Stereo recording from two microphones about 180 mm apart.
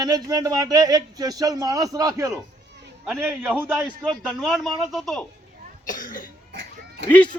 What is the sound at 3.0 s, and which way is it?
Speech, centre (ahead or behind).